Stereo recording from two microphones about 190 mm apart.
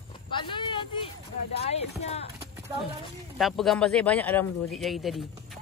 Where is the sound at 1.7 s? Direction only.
35° left (ahead or behind).